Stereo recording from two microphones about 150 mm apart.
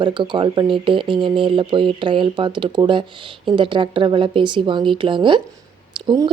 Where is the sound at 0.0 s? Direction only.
35° right (ahead or behind).